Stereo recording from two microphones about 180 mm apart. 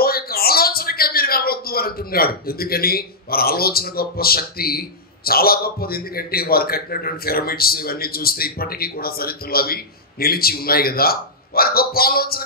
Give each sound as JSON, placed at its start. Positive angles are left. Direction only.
{"t": 0.0, "sound": "a man's voice", "side_deg": 55}